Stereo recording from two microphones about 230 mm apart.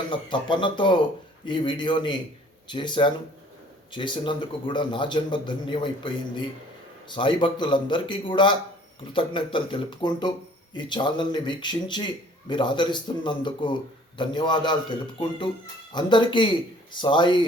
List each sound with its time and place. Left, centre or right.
0.1 s a man's voice: left